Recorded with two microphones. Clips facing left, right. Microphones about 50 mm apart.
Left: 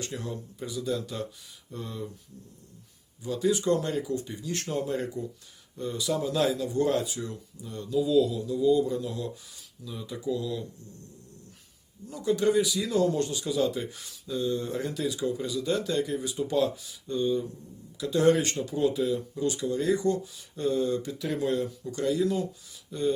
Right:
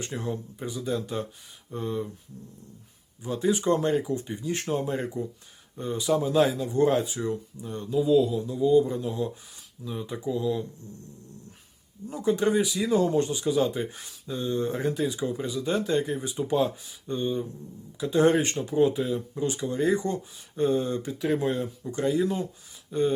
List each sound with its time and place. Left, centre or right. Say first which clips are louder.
0.0 s speech: right 3 dB; right
3.2 s speech: right 1 dB; right
12.0 s speech: right 1 dB; right